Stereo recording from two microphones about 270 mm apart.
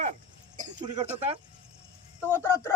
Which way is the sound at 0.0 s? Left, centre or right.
Right.